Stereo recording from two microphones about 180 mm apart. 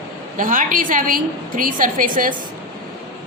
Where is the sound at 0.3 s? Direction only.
50° right (ahead or behind).